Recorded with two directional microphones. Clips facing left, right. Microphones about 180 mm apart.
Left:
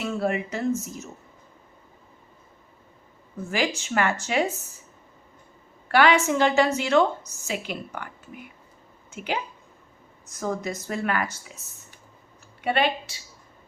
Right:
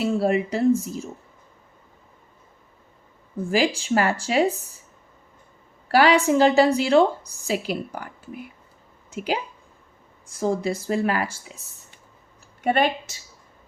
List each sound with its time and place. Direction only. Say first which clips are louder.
0.0 s speech: right 5 dB; 35° right (ahead or behind)
3.5 s speech: right 5 dB; 35° right (ahead or behind)
5.9 s a woman's voice: right 3 dB; 35° right (ahead or behind)
12.6 s a woman's voice: right 3 dB; 45° right (ahead or behind)